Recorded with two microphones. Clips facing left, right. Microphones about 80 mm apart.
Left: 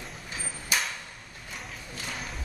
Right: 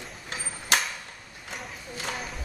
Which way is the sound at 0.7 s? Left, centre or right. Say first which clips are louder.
Right 4 dB; right.